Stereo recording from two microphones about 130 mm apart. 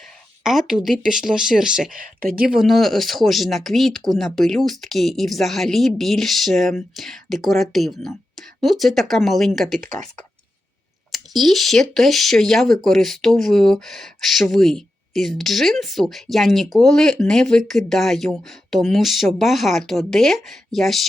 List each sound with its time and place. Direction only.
0.4 s speech: centre (ahead or behind)
2.0 s speech: 90° right
2.5 s speech: centre (ahead or behind)
11.1 s speech: centre (ahead or behind)